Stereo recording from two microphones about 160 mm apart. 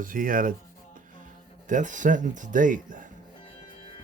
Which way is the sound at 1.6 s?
50° right (ahead or behind).